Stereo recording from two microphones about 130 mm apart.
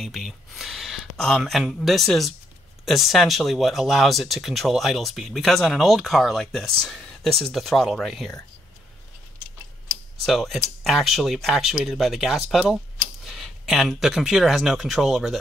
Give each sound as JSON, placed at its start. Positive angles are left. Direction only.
{"t": 0.0, "sound": "speech", "side_deg": 0}
{"t": 10.2, "sound": "speech", "side_deg": 0}